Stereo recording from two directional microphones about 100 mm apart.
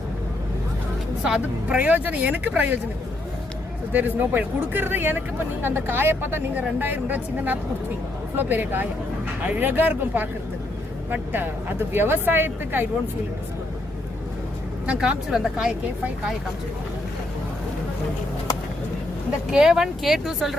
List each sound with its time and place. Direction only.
1.2 s speech: 10° right (ahead or behind)
3.9 s a woman's voice: 20° right (ahead or behind)
14.8 s speech: 10° right (ahead or behind)
19.5 s speech: 5° right (ahead or behind)